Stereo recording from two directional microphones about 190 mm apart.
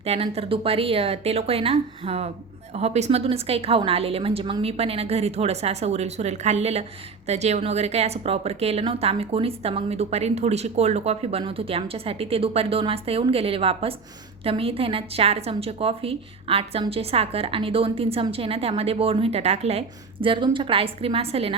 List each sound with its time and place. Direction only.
0.0 s a woman's voice: 30° right (ahead or behind)